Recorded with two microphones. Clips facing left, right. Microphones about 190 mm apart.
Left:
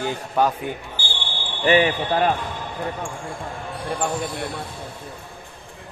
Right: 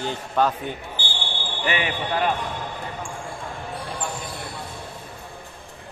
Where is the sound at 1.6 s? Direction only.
35° left (ahead or behind).